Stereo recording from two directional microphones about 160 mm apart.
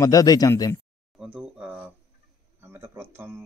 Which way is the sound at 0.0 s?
20° left (ahead or behind).